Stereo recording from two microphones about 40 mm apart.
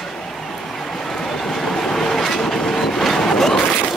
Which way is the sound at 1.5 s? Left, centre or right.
Centre.